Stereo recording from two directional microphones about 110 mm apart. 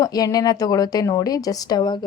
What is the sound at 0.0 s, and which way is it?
A woman's voice, 35° left (ahead or behind).